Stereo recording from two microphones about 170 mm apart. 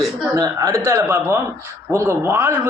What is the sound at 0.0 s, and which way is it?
Speech, 20° right (ahead or behind).